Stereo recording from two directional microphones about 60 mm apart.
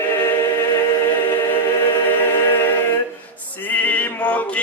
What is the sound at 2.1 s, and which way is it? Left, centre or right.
A capella, left.